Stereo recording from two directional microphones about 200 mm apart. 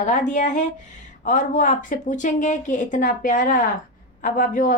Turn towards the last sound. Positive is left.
turn(degrees=40)  # may be behind; listen again after turning